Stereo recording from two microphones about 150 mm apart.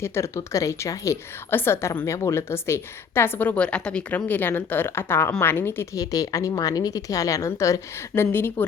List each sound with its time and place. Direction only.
0.0 s a woman's voice: 15° left (ahead or behind)